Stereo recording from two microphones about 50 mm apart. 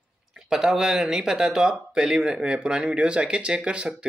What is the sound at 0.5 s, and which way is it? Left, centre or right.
Speech, centre.